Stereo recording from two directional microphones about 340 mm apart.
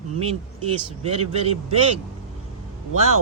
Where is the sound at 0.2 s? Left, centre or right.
Centre.